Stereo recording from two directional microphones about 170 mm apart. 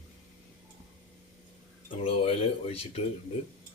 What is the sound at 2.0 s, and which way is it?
Speech, 35° left (ahead or behind).